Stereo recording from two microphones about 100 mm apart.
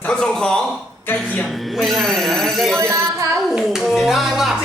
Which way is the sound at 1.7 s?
Centre (ahead or behind).